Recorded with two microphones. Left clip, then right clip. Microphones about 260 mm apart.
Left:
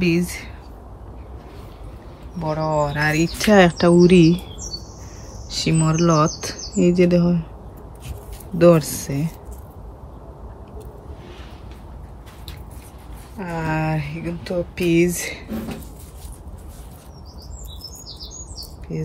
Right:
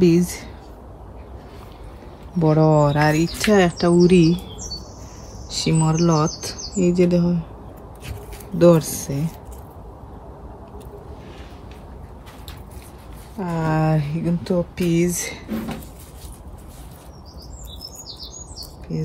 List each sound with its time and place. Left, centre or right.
0.0 s speech: centre
2.9 s speech: centre
5.5 s speech: centre
8.5 s speech: centre
13.4 s speech: centre
18.9 s speech: centre